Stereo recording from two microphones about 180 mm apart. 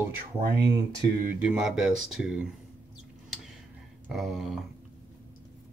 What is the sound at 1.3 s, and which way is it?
Speech, 5° right (ahead or behind).